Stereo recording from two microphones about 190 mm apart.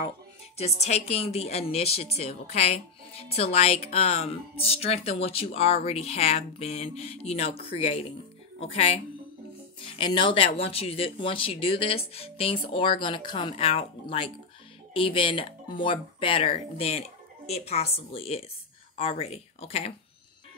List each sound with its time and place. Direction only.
0.6 s a woman's voice: 35° left (ahead or behind)